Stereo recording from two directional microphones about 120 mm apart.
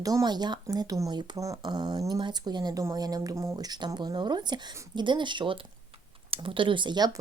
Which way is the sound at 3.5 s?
35° right (ahead or behind).